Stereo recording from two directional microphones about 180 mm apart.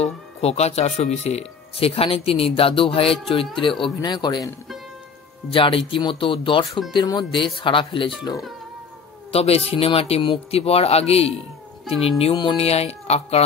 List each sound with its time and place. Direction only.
0.0 s speech: 35° left (ahead or behind)
5.5 s speech: 30° left (ahead or behind)